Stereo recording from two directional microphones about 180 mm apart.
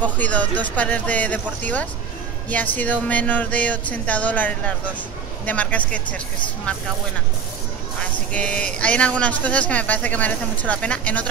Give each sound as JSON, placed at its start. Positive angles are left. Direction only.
{"t": 0.2, "sound": "speech", "side_deg": 10}
{"t": 8.3, "sound": "speech", "side_deg": 5}